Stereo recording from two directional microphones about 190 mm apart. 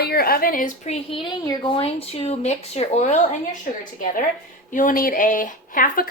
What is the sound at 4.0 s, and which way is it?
Speech, 45° left (ahead or behind).